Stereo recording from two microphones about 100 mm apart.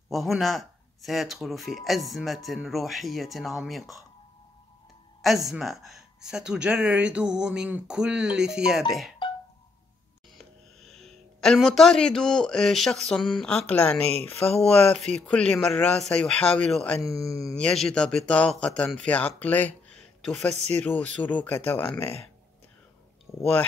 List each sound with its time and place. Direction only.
0.1 s speech: centre (ahead or behind)
5.2 s speech: centre (ahead or behind)
10.3 s speech: centre (ahead or behind)
20.2 s speech: 5° left (ahead or behind)
20.8 s speech: 15° left (ahead or behind)
23.3 s speech: centre (ahead or behind)